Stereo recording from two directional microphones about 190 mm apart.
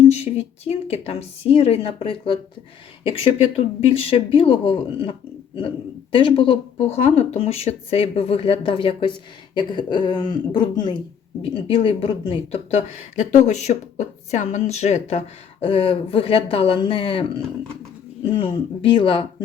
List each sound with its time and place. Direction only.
0.1 s a woman's voice: 35° left (ahead or behind)
3.8 s a woman's voice: 30° left (ahead or behind)